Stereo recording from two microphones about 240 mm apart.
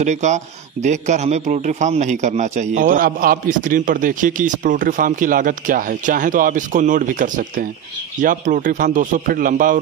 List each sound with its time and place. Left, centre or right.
0.0 s a man's voice: right